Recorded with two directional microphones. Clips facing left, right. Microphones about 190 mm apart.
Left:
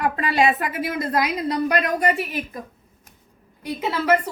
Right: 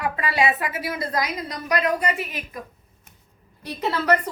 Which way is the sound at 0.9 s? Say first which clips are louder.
Left 6 dB; 60° left (ahead or behind).